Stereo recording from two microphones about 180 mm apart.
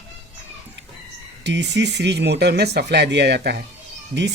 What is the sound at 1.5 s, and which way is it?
Speech, 75° right (ahead or behind).